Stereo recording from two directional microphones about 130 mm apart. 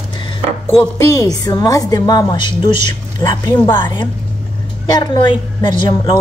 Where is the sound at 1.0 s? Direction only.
25° left (ahead or behind).